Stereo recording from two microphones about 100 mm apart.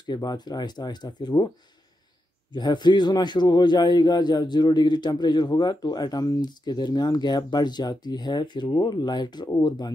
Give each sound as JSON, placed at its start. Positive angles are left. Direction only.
{"t": 0.0, "sound": "a man's voice", "side_deg": 45}
{"t": 2.5, "sound": "a man's voice", "side_deg": 45}